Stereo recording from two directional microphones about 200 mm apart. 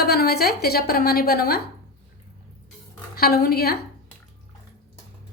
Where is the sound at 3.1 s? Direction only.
50° left (ahead or behind).